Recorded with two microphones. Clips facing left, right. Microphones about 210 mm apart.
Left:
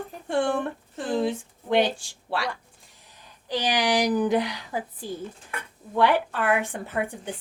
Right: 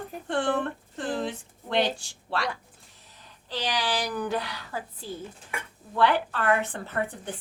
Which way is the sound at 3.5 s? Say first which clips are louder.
Left 5 dB; 15° left (ahead or behind).